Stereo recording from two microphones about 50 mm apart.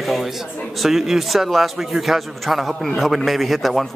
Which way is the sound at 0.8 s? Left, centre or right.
Centre.